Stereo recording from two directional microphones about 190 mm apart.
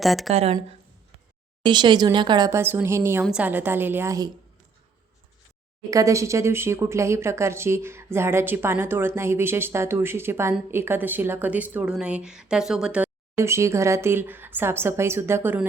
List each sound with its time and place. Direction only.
0.0 s a woman's voice: centre (ahead or behind)
1.6 s a woman's voice: 25° right (ahead or behind)
5.9 s a woman's voice: 15° right (ahead or behind)